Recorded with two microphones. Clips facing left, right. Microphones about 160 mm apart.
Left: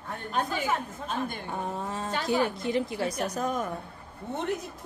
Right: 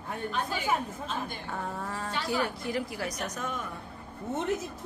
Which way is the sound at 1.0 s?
50° left (ahead or behind).